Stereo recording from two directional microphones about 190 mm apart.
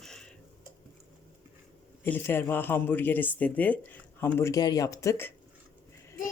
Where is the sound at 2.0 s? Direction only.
10° left (ahead or behind).